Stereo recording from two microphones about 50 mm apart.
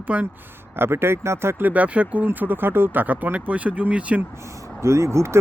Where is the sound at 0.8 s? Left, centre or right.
Right.